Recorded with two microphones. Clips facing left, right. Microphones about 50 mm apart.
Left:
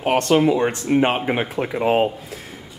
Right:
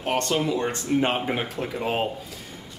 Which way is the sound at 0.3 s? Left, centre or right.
Left.